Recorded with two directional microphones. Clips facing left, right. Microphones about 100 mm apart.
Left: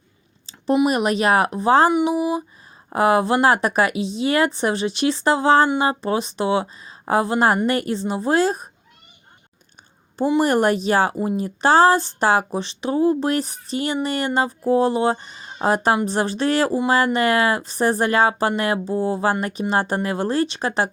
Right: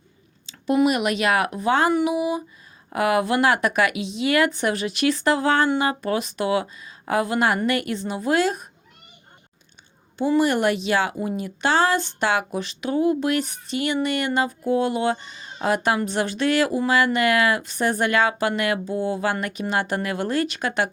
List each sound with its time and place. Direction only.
0.9 s speech: 35° left (ahead or behind)
10.4 s speech: 40° left (ahead or behind)